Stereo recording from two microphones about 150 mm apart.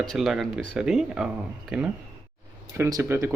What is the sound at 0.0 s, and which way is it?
Speech, centre (ahead or behind).